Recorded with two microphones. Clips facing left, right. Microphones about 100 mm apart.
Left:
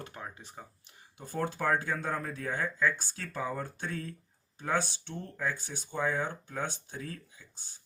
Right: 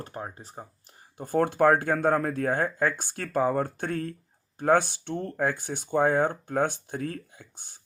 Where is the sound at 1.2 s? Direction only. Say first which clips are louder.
Right 11 dB; 55° right (ahead or behind).